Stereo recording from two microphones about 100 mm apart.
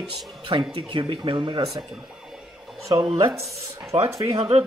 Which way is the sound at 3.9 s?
75° right (ahead or behind).